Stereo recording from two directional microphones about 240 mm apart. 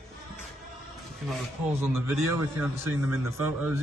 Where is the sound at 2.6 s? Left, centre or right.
Centre.